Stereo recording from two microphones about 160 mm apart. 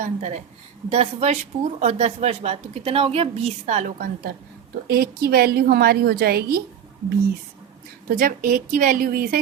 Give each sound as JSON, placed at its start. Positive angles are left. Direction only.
{"t": 0.0, "sound": "speech", "side_deg": -50}
{"t": 4.9, "sound": "a woman's voice", "side_deg": -75}
{"t": 8.1, "sound": "a woman's voice", "side_deg": -60}